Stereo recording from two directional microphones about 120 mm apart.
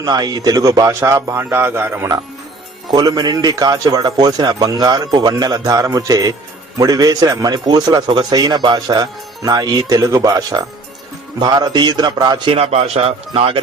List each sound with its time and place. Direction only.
0.0 s a man's voice: 35° right (ahead or behind)
2.9 s a man's voice: 35° right (ahead or behind)
12.5 s speech: 60° right (ahead or behind)